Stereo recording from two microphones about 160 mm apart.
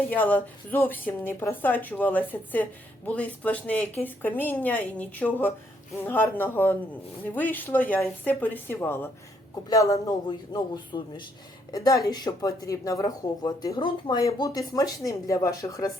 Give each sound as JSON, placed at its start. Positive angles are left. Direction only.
{"t": 0.1, "sound": "a woman's voice", "side_deg": 10}